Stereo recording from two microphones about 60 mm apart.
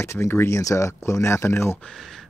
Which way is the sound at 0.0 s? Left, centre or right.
Left.